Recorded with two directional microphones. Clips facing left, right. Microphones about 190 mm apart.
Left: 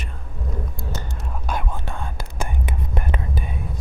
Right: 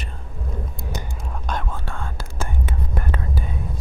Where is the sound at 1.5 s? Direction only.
15° left (ahead or behind).